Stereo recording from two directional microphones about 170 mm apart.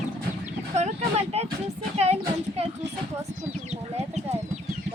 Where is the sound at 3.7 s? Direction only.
40° right (ahead or behind).